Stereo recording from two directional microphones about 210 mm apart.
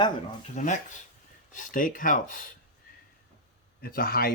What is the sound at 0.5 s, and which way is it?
Speech, 35° left (ahead or behind).